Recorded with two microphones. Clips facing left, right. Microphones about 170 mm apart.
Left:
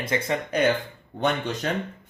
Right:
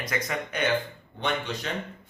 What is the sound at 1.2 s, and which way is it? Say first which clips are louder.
Speech: left 5 dB; 50° left (ahead or behind).